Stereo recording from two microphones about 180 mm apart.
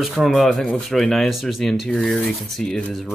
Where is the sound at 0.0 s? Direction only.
Centre (ahead or behind).